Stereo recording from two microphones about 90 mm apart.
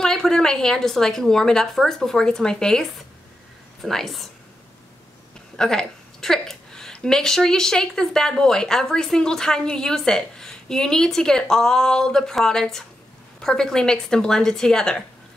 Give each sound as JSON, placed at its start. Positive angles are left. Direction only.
{"t": 0.0, "sound": "a woman's voice", "side_deg": 5}
{"t": 5.6, "sound": "a woman's voice", "side_deg": 10}